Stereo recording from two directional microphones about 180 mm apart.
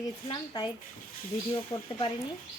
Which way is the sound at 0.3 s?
25° left (ahead or behind).